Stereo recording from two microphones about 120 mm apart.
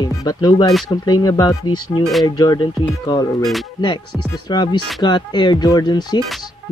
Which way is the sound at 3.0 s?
35° left (ahead or behind).